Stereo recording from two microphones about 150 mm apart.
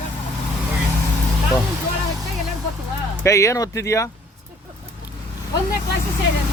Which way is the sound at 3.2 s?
20° left (ahead or behind).